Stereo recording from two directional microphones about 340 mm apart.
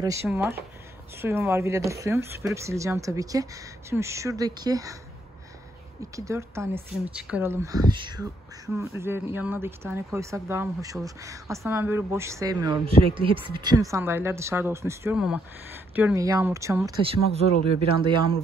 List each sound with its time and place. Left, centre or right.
0.0 s a woman's voice: centre
6.1 s a woman's voice: centre